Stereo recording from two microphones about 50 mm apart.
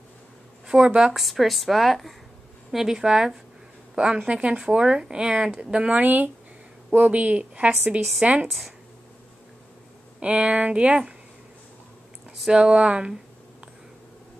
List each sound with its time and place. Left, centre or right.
0.7 s speech: centre
1.1 s speech: centre
2.7 s a woman's voice: centre; by 8.5 s right
8.5 s speech: centre
10.2 s a woman's voice: right
12.4 s a woman's voice: centre